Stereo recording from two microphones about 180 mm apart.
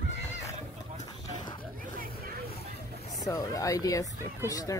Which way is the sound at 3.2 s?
20° left (ahead or behind).